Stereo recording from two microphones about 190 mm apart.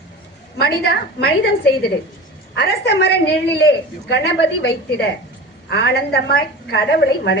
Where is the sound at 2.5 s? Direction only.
65° left (ahead or behind).